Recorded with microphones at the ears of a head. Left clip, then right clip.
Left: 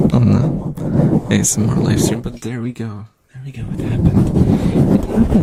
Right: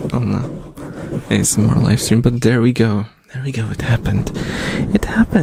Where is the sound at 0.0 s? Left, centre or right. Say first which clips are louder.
Left 6 dB; left.